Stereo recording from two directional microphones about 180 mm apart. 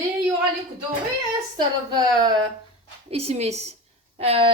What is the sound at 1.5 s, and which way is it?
Speech, 20° right (ahead or behind).